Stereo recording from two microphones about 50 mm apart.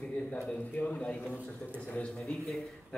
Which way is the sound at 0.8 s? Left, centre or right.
Left.